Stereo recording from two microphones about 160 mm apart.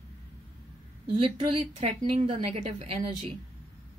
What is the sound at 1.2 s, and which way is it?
A woman's voice, 35° right (ahead or behind).